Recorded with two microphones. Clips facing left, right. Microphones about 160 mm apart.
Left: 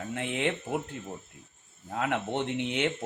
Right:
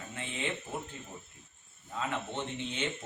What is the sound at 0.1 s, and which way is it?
Speech, 70° left (ahead or behind).